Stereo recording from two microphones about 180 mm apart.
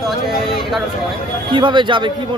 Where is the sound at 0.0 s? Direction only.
Centre (ahead or behind).